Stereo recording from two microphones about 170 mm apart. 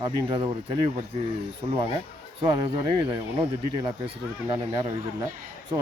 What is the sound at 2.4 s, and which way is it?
Speech, 30° right (ahead or behind).